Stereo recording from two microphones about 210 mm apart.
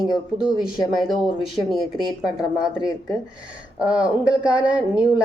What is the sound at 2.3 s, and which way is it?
Speech, 20° left (ahead or behind).